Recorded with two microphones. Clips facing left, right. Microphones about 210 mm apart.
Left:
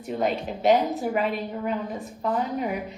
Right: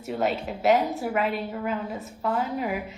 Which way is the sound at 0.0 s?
5° right (ahead or behind).